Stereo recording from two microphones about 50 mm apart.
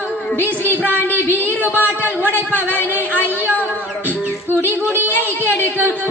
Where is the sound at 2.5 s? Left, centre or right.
Left.